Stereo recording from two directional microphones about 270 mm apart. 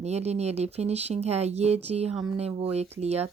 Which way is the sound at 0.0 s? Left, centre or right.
Right.